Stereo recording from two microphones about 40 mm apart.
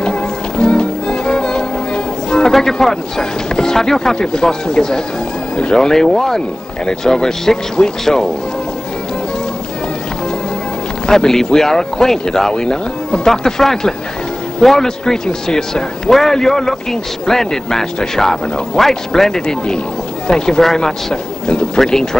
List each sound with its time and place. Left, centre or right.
0.0 s music: left
2.5 s speech: centre
11.1 s speech: centre